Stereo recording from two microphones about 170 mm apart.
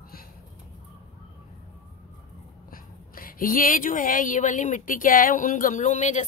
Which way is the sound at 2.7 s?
55° left (ahead or behind).